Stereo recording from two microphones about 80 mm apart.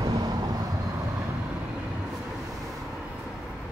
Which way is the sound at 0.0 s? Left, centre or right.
Right.